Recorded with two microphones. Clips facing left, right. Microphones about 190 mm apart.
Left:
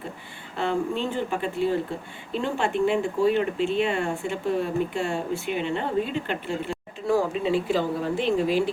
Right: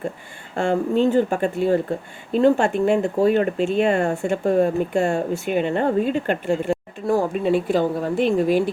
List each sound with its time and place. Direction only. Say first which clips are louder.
0.5 s speech: right 6 dB; 45° right (ahead or behind)